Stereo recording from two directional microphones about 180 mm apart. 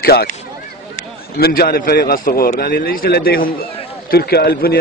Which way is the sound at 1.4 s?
55° left (ahead or behind).